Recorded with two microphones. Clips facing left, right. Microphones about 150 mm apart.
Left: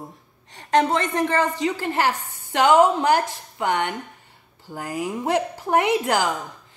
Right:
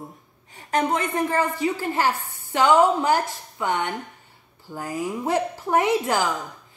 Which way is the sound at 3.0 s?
65° left (ahead or behind).